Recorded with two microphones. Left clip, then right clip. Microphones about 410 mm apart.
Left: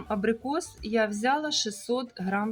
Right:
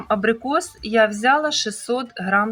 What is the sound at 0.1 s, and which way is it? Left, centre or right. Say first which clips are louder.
Speech: right 9 dB; left.